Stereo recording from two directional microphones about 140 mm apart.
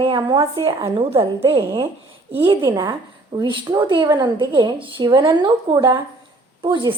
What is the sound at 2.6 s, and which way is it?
A woman's voice, 30° right (ahead or behind).